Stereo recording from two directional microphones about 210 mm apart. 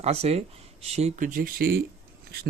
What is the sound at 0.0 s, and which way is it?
Speech, 30° right (ahead or behind).